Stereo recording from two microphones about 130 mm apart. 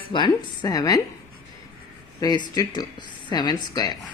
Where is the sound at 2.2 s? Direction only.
30° left (ahead or behind).